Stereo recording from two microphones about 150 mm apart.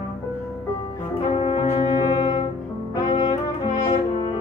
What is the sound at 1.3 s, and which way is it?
Brass instrument, 35° left (ahead or behind).